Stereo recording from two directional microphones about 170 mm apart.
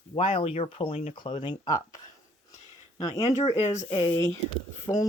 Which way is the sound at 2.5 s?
20° left (ahead or behind).